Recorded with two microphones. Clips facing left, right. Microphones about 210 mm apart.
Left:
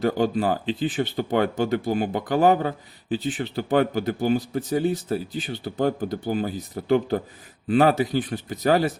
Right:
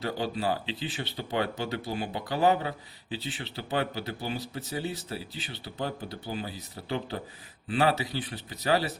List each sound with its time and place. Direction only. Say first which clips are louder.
0.0 s speech: left 8 dB; 45° left (ahead or behind)